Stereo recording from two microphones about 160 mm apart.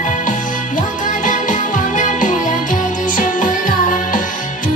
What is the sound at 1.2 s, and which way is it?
Music, 55° left (ahead or behind).